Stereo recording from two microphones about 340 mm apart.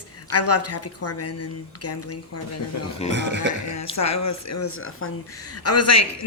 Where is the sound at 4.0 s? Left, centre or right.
Left.